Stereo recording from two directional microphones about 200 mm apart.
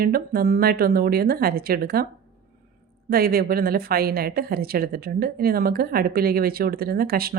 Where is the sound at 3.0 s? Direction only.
50° right (ahead or behind).